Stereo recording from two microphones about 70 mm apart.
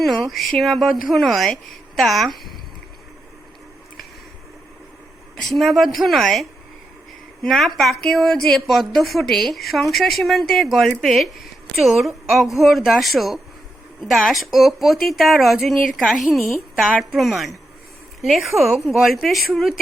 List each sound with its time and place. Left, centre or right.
0.0 s a woman's voice: centre
5.4 s a woman's voice: centre